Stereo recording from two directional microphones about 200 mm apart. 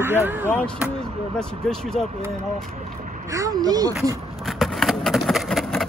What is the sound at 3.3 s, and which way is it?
Speech, 20° right (ahead or behind).